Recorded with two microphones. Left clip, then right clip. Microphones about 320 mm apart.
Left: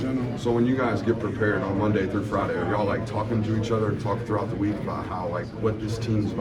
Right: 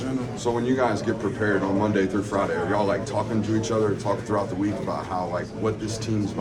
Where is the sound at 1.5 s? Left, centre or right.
Right.